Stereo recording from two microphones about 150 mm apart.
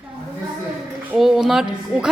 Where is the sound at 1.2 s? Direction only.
Centre (ahead or behind).